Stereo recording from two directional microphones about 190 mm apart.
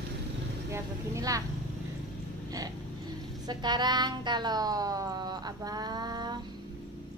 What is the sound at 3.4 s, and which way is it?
Speech, 20° right (ahead or behind).